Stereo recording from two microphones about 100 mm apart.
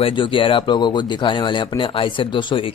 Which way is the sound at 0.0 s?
60° left (ahead or behind).